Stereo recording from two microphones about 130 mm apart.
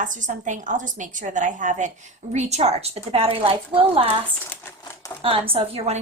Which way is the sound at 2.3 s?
60° right (ahead or behind).